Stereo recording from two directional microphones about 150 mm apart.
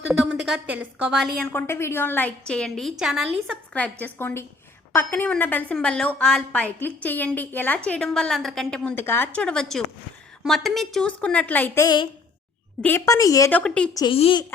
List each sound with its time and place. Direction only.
0.1 s a woman's voice: centre (ahead or behind)
1.4 s a woman's voice: 15° left (ahead or behind)
13.5 s a woman's voice: 5° left (ahead or behind)
14.1 s speech: 35° left (ahead or behind)